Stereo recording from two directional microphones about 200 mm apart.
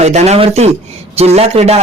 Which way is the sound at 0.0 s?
35° right (ahead or behind).